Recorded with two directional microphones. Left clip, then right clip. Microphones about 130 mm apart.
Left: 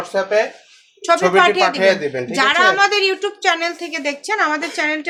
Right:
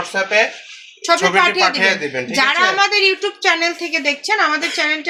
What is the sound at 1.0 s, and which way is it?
A woman's voice, 40° right (ahead or behind).